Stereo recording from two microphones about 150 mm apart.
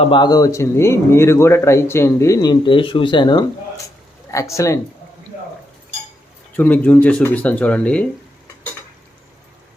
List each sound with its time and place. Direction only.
0.0 s speech: 30° left (ahead or behind)
4.3 s speech: 20° left (ahead or behind)
6.6 s speech: 10° left (ahead or behind)